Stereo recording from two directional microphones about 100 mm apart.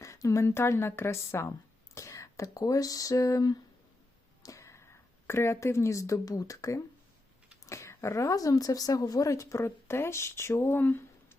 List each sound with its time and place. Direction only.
0.0 s a woman's voice: 30° left (ahead or behind)